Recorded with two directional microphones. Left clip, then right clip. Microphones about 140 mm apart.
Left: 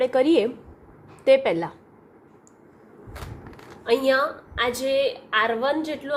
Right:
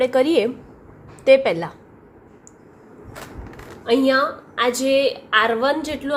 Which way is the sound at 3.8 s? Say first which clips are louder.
Right 3 dB; 40° left (ahead or behind).